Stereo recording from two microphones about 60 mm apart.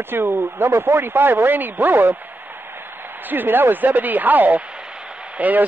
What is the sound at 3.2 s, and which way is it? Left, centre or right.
A man's voice, right.